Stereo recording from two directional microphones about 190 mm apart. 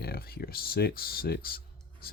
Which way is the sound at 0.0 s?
55° left (ahead or behind).